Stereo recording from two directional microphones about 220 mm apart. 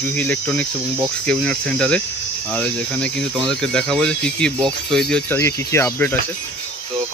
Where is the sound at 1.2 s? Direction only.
5° left (ahead or behind).